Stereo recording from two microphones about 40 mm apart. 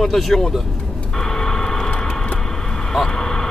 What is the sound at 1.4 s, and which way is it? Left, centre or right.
Vehicle, centre.